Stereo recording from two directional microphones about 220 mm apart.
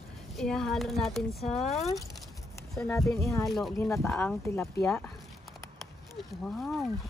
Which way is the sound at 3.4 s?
Centre (ahead or behind).